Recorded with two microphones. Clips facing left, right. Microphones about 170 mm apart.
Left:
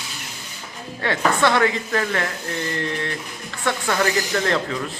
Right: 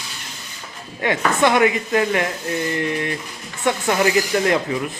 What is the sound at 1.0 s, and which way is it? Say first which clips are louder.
Speech: right 2 dB; 15° right (ahead or behind).